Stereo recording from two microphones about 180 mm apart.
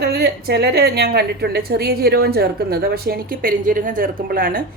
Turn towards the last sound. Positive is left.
turn(degrees=-50)  # may be behind; listen again after turning